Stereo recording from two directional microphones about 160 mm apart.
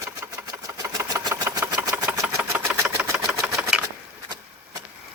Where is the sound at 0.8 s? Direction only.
25° right (ahead or behind); by 3.8 s 5° right (ahead or behind).